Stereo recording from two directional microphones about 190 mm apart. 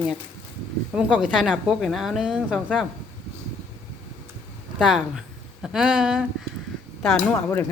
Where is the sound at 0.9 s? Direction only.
5° right (ahead or behind).